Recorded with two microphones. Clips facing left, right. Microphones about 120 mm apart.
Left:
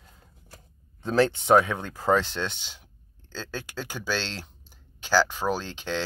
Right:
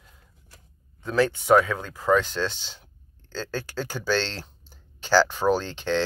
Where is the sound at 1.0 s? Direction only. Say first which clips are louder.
Left 1 dB; 25° left (ahead or behind).